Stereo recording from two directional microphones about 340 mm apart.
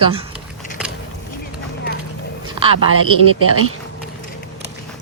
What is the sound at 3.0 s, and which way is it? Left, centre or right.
Speech, right.